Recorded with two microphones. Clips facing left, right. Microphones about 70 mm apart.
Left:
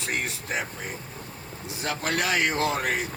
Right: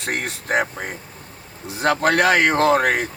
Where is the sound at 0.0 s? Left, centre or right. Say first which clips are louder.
Right 4 dB; right.